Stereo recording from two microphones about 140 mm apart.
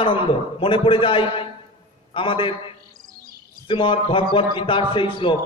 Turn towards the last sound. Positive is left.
turn(degrees=35)  # may be behind; listen again after turning